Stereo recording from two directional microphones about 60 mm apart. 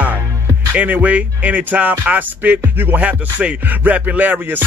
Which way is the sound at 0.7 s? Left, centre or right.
Right.